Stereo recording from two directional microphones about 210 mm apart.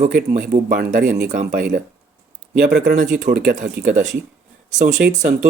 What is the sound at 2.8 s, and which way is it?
Speech, 35° right (ahead or behind).